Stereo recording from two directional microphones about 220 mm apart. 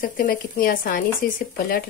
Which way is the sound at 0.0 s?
40° left (ahead or behind).